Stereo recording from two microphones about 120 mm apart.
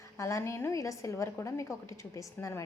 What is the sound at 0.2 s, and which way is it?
A woman's voice, 25° left (ahead or behind).